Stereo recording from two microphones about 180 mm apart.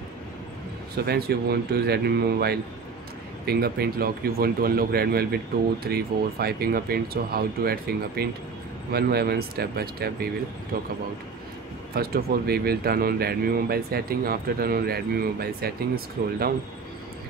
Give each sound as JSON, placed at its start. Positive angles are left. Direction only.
{"t": 0.9, "sound": "speech", "side_deg": -60}
{"t": 11.9, "sound": "speech", "side_deg": -60}